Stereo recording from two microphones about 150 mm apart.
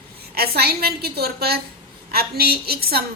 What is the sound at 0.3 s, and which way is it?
A woman's voice, 90° right.